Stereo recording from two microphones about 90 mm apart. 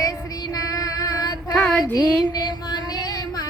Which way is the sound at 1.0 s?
45° left (ahead or behind).